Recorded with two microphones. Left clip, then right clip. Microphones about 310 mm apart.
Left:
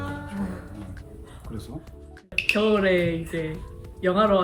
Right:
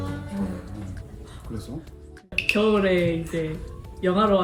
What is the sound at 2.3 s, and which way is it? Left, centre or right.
Speech, centre.